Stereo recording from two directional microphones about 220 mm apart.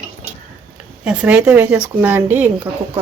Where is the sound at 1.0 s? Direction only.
5° right (ahead or behind).